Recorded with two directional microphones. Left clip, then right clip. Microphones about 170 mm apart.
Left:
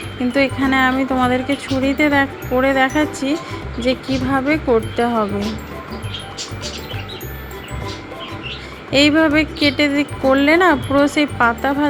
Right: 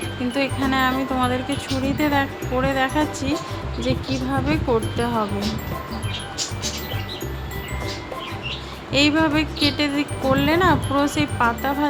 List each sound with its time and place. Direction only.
0.3 s speech: 25° left (ahead or behind)
8.9 s speech: 25° left (ahead or behind)